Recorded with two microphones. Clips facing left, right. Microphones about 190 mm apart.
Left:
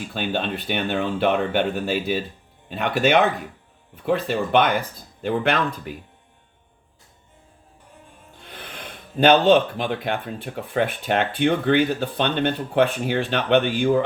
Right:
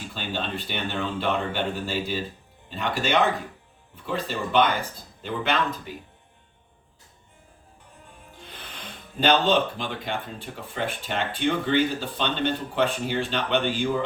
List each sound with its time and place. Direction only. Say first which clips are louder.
0.1 s speech: left 5 dB; 60° left (ahead or behind)
9.2 s speech: left 6 dB; 55° left (ahead or behind)